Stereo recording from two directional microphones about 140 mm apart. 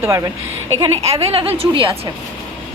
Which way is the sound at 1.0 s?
45° right (ahead or behind).